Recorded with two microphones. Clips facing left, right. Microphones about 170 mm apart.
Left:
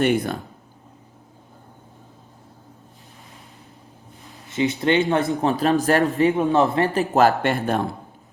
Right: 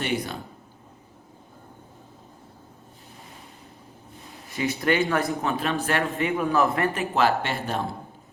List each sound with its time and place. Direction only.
0.0 s speech: 50° left (ahead or behind)
4.5 s speech: 20° left (ahead or behind)
5.4 s speech: 35° left (ahead or behind); by 7.8 s 50° left (ahead or behind)